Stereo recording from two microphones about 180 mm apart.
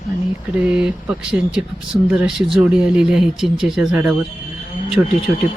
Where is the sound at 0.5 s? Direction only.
5° right (ahead or behind).